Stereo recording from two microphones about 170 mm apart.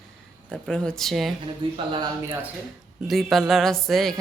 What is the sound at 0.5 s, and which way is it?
Speech, 5° left (ahead or behind).